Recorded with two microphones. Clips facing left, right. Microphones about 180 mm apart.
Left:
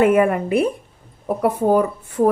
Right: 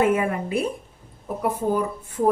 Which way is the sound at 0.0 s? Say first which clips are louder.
Left 6 dB; 65° left (ahead or behind).